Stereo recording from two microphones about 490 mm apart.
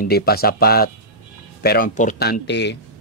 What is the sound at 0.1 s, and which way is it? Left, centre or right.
Speech, centre.